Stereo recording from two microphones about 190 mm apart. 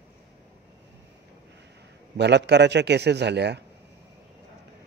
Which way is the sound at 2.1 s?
65° right (ahead or behind).